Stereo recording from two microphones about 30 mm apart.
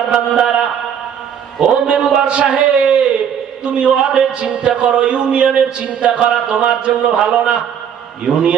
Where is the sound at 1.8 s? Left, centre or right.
Right.